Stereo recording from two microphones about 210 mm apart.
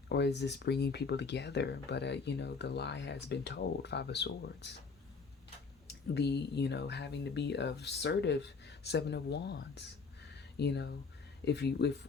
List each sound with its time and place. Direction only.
0.1 s speech: 55° left (ahead or behind)
5.9 s speech: 55° left (ahead or behind)
10.3 s a sound: 55° left (ahead or behind)
11.4 s speech: 55° left (ahead or behind)